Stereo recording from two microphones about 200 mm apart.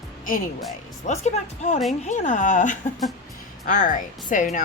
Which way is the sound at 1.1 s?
35° left (ahead or behind).